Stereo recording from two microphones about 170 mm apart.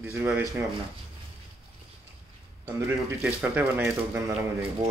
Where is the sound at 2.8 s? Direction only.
15° right (ahead or behind).